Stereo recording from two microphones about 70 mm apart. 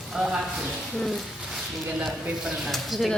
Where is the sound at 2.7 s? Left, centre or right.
Centre.